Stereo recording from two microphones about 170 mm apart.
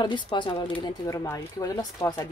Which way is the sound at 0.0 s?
25° left (ahead or behind).